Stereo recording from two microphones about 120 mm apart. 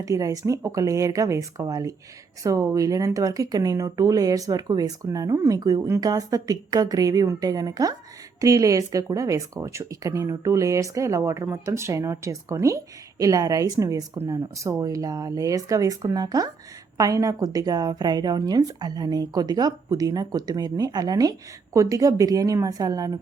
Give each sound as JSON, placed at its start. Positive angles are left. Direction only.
{"t": 0.0, "sound": "a woman's voice", "side_deg": -30}